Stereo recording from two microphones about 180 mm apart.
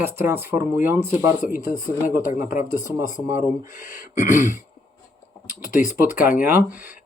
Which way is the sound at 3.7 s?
50° left (ahead or behind).